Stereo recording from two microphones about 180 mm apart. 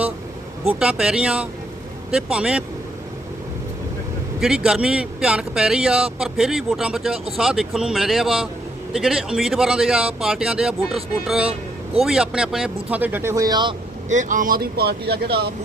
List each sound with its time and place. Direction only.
0.7 s speech: 5° right (ahead or behind)
4.4 s speech: 5° right (ahead or behind); by 13.7 s 25° right (ahead or behind)
14.1 s speech: 45° right (ahead or behind); by 15.5 s 65° right (ahead or behind)